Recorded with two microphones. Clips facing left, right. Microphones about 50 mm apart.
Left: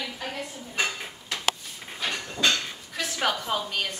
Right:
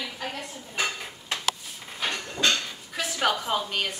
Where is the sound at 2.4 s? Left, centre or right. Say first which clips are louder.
Even; centre.